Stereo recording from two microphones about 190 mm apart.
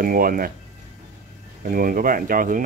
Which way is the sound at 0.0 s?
50° right (ahead or behind).